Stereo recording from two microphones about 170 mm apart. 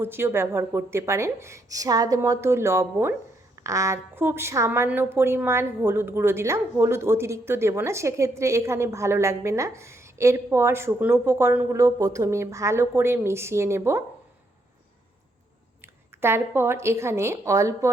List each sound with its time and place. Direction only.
0.0 s a woman's voice: 15° right (ahead or behind)
15.8 s a woman's voice: 15° right (ahead or behind)